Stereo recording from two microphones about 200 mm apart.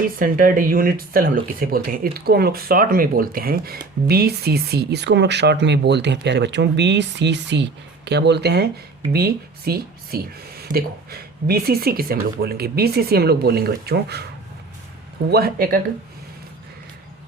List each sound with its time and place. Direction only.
0.2 s speech: 45° right (ahead or behind)
15.3 s speech: 50° right (ahead or behind)